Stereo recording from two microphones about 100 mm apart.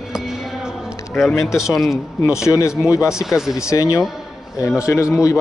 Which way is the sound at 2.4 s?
30° left (ahead or behind).